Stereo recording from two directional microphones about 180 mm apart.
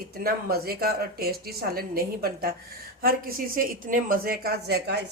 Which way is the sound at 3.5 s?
50° right (ahead or behind).